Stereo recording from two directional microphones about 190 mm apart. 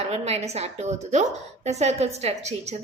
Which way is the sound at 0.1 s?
35° right (ahead or behind).